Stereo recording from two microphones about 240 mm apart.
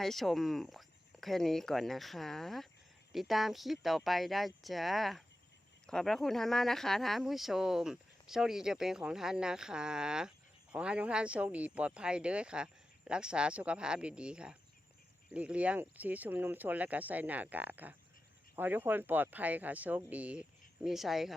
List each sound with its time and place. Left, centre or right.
0.0 s speech: centre